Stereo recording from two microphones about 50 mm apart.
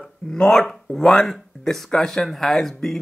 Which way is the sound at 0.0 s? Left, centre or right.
Centre.